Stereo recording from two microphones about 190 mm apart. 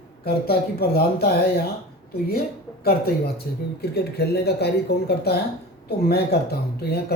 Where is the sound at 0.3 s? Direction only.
55° left (ahead or behind).